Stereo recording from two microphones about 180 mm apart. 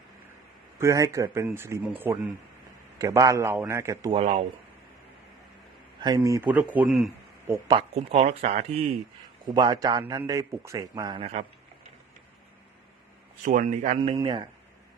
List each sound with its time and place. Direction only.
0.8 s a man's voice: 15° right (ahead or behind)
4.1 s speech: 35° right (ahead or behind)
6.0 s a man's voice: 20° right (ahead or behind); by 7.1 s centre (ahead or behind)
7.5 s a man's voice: 25° right (ahead or behind)
7.9 s speech: 35° right (ahead or behind)
9.5 s a man's voice: 20° right (ahead or behind)
13.4 s a man's voice: 45° right (ahead or behind)
14.2 s a man's voice: 25° right (ahead or behind)